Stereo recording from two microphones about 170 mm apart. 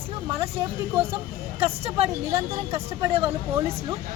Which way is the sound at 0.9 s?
35° right (ahead or behind).